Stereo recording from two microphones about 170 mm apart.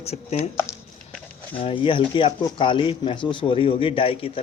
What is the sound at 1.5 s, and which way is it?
A man's voice, 30° left (ahead or behind).